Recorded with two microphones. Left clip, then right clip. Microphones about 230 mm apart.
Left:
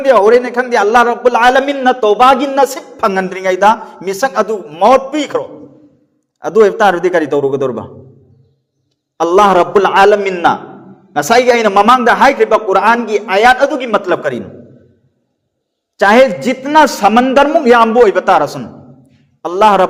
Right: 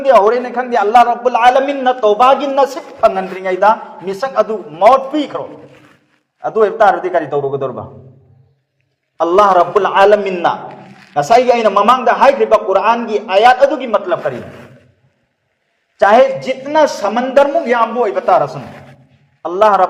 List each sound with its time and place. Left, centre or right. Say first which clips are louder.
0.0 s a man's voice: left 2 dB; left
9.1 s a man's voice: left 1 dB; left
16.0 s a man's voice: left 1 dB; left